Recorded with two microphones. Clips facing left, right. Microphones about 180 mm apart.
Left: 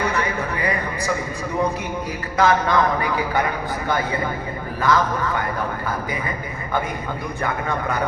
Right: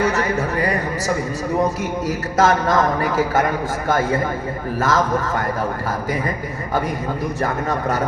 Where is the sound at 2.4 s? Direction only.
45° right (ahead or behind).